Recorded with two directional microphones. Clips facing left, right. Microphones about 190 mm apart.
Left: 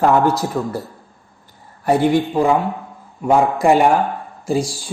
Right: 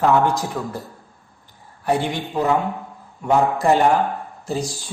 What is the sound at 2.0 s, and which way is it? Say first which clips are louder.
Speech: left 7 dB; 10° left (ahead or behind).